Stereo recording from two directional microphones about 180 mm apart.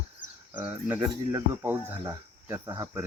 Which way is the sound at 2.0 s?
15° right (ahead or behind).